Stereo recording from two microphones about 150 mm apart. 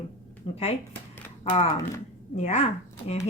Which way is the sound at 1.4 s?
40° left (ahead or behind).